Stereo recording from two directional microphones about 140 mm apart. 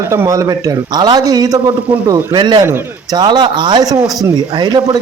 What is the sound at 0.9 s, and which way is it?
A man's voice, 30° right (ahead or behind).